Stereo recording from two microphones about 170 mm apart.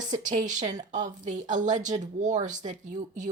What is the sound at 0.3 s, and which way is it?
Speech, 45° right (ahead or behind).